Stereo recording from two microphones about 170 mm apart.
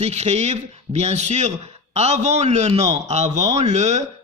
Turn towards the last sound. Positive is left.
turn(degrees=-45)  # may be behind; listen again after turning